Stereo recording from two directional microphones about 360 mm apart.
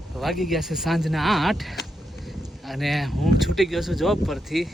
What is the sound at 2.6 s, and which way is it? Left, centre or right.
Speech, centre.